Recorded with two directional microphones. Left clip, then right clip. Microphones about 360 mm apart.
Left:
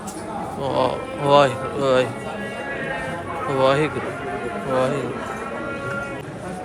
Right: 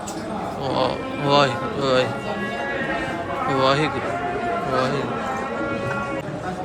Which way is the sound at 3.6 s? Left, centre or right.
Centre.